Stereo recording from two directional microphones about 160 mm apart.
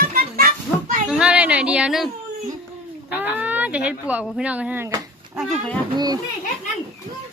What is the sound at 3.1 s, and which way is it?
A child's voice, 10° right (ahead or behind).